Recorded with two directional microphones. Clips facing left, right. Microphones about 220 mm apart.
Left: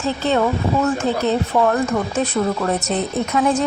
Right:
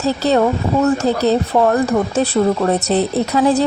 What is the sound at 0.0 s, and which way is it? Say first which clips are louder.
Speech: right 4 dB; 40° right (ahead or behind).